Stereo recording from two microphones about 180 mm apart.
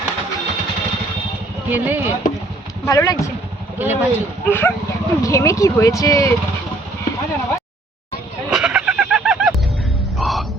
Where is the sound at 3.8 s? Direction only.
10° right (ahead or behind).